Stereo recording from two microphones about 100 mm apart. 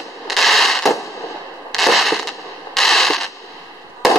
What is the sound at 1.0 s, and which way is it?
Fireworks, 30° left (ahead or behind).